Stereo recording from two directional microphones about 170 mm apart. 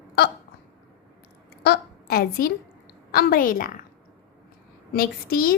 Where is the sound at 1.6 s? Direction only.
65° left (ahead or behind).